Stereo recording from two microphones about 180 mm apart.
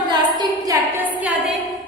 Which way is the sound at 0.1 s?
25° right (ahead or behind).